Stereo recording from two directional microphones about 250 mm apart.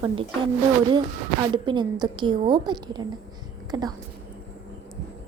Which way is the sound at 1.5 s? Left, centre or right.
Centre.